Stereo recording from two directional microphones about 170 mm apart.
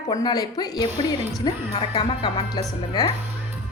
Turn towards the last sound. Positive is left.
turn(degrees=25)  # may be behind; listen again after turning